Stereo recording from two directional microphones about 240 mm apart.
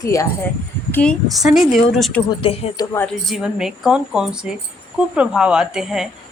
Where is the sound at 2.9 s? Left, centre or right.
Centre.